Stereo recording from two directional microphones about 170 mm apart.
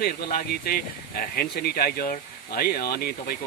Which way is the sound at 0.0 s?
65° left (ahead or behind).